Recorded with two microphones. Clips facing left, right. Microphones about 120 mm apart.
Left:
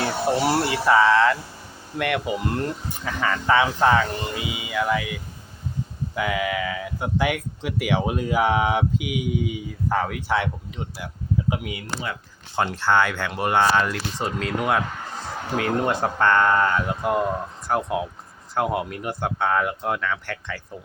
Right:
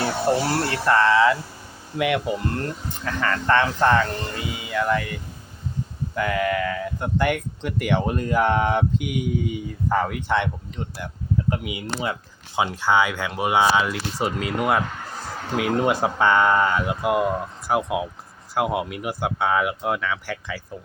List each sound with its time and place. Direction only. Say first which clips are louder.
0.4 s speech: left 2 dB; 10° left (ahead or behind)
2.4 s speech: left 1 dB; 15° left (ahead or behind)
10.9 s a sound: even; 5° left (ahead or behind)
11.7 s speech: right 3 dB; 20° right (ahead or behind)
12.5 s speech: even; 10° right (ahead or behind)